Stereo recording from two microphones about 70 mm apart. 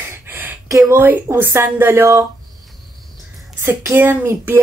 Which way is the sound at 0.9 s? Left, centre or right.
Right.